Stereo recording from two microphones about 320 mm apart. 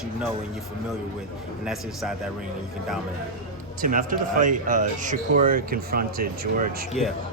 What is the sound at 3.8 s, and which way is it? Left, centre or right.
Speech, right.